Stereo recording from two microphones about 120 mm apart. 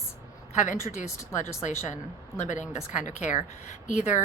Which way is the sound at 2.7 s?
70° left (ahead or behind).